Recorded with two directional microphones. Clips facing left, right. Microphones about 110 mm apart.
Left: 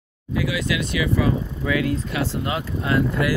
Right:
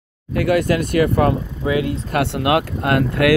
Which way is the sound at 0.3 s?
60° right (ahead or behind).